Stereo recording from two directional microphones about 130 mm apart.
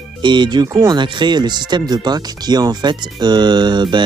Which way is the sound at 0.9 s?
35° right (ahead or behind).